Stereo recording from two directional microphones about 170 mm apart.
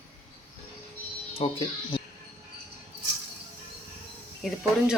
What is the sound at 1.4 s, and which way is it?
Speech, 35° left (ahead or behind).